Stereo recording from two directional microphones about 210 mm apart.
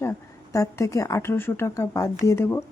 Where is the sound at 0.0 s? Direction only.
15° left (ahead or behind).